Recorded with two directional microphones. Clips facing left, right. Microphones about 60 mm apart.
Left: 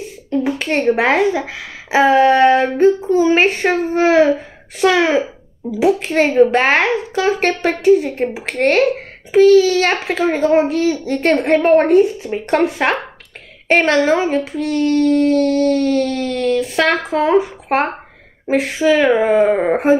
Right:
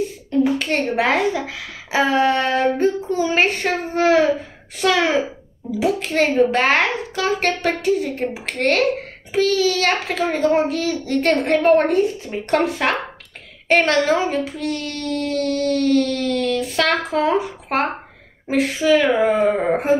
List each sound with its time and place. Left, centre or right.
0.4 s speech: left